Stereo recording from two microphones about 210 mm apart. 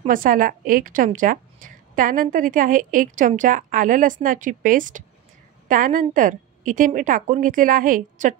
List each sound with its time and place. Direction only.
0.0 s a woman's voice: 40° right (ahead or behind)